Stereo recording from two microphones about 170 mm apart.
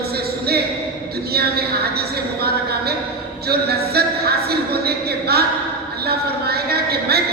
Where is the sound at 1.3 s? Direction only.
65° right (ahead or behind).